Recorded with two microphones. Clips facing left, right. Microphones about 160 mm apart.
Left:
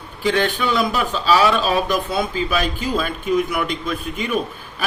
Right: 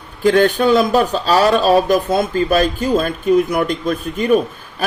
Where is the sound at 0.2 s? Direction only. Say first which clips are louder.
Right 7 dB; 45° right (ahead or behind).